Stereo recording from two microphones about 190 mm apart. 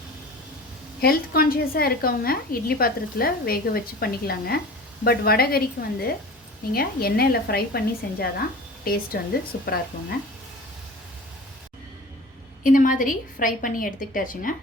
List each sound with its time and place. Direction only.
1.0 s a woman's voice: 50° left (ahead or behind)
9.5 s a woman's voice: 60° left (ahead or behind)
12.6 s a woman's voice: 45° left (ahead or behind)